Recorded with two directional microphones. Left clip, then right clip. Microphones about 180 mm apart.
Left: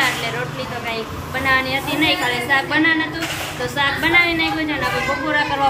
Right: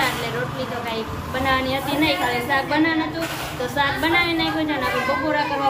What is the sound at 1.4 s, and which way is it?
A woman's voice, centre (ahead or behind).